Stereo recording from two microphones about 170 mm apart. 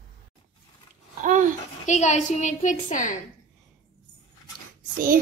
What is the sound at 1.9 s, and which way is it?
A woman's voice, 45° left (ahead or behind).